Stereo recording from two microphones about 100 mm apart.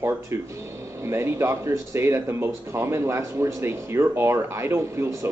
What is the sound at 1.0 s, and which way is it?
Speech, 25° right (ahead or behind).